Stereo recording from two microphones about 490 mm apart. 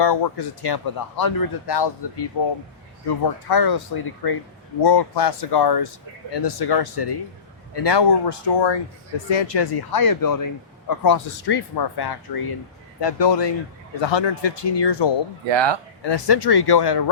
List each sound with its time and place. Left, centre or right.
0.0 s speech: left
3.5 s speech: left
15.4 s speech: right
16.0 s speech: left